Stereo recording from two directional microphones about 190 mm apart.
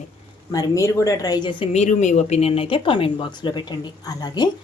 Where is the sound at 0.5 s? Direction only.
20° left (ahead or behind).